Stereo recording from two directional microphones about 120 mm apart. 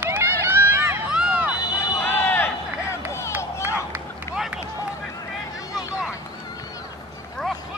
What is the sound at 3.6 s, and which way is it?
Run, 15° right (ahead or behind).